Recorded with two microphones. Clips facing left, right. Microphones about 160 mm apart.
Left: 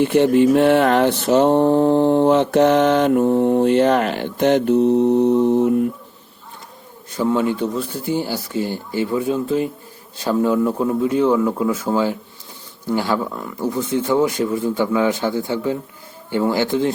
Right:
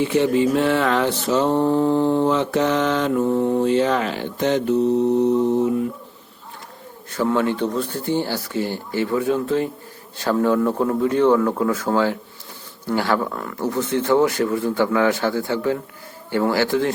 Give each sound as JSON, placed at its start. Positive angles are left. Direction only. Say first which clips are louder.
{"t": 0.0, "sound": "mantra", "louder": "left 4 dB", "side_deg": 60}
{"t": 1.5, "sound": "speech", "louder": "left 4 dB", "side_deg": 20}
{"t": 2.0, "sound": "mantra", "louder": "left 4 dB", "side_deg": 60}
{"t": 7.1, "sound": "speech", "louder": "left 1 dB", "side_deg": 15}